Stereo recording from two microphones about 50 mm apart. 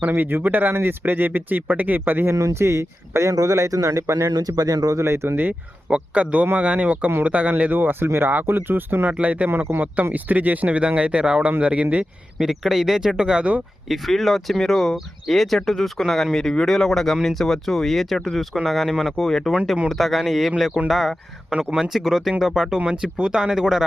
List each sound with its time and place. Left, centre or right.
0.1 s speech: right
2.3 s speech: right
4.9 s speech: right
5.9 s speech: right
9.1 s speech: right
12.4 s speech: centre
13.8 s speech: centre